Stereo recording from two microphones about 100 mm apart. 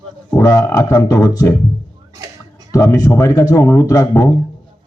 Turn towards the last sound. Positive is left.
turn(degrees=30)  # may be behind; listen again after turning